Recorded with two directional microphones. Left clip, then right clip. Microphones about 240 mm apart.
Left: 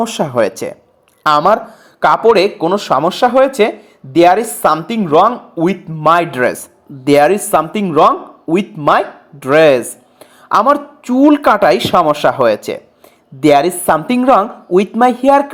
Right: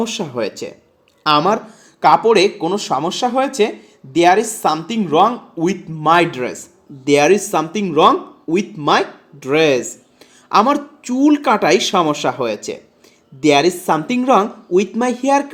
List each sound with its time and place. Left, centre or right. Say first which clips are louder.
0.0 s a woman's voice: left 7 dB; left